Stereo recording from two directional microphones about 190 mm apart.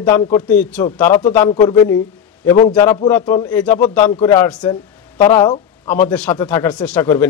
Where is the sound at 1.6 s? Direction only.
20° left (ahead or behind).